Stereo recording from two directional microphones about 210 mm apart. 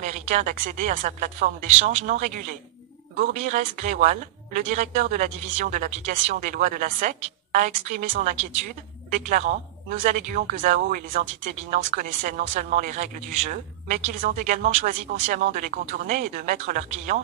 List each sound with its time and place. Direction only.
0.0 s speech: 35° right (ahead or behind)